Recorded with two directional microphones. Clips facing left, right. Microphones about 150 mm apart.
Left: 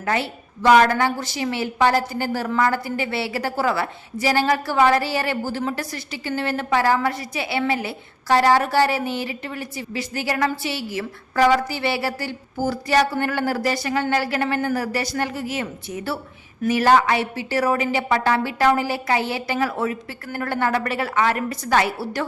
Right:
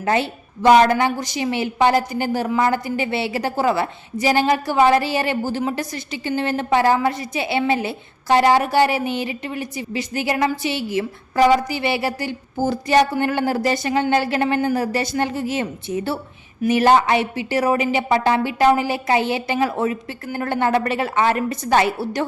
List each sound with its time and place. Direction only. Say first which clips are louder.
0.0 s a woman's voice: right 4 dB; 20° right (ahead or behind)